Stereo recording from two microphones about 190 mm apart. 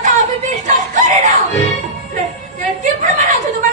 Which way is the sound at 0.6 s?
40° right (ahead or behind).